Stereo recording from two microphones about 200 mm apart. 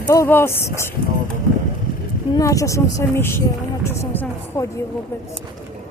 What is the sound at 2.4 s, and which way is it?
Speech, 15° left (ahead or behind).